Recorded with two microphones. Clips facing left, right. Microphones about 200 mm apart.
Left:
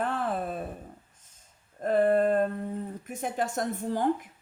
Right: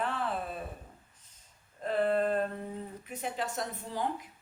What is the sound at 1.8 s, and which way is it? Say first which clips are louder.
A woman's voice: left 6 dB; 50° left (ahead or behind).